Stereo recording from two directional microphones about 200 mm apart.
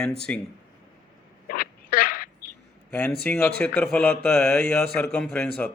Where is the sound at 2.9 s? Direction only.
5° left (ahead or behind).